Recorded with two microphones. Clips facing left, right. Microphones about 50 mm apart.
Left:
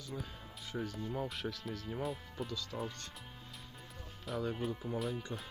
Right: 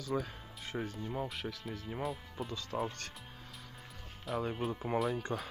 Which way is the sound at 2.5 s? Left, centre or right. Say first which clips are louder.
Even; right.